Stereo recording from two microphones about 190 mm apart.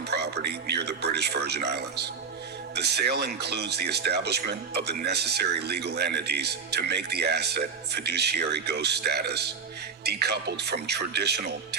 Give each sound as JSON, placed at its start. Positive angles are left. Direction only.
{"t": 0.4, "sound": "speech", "side_deg": -60}